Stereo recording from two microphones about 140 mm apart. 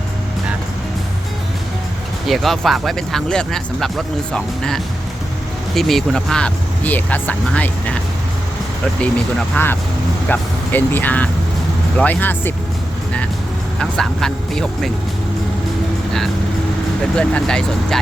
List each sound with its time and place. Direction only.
2.2 s speech: centre (ahead or behind)
9.0 s speech: 10° left (ahead or behind)
13.7 s speech: 5° left (ahead or behind)
17.2 s speech: 5° left (ahead or behind)